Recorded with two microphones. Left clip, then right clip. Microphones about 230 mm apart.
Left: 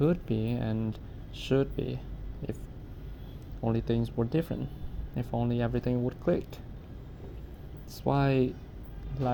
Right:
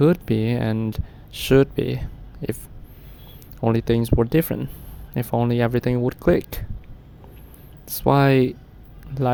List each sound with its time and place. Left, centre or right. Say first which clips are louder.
0.0 s speech: right 10 dB; right
3.6 s speech: right 10 dB; right
7.9 s speech: right 11 dB; right